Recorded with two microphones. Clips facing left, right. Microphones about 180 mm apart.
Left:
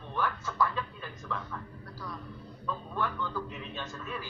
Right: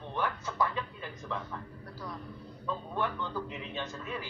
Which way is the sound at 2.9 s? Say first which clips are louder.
Left 1 dB; 20° right (ahead or behind).